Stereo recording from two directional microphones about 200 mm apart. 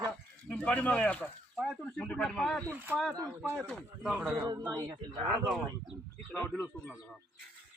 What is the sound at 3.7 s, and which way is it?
A man's voice, centre (ahead or behind).